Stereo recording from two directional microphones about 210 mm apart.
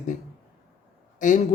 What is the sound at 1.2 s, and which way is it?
Speech, 40° left (ahead or behind).